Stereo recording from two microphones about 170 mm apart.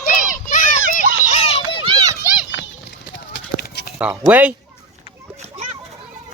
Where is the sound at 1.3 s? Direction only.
35° left (ahead or behind).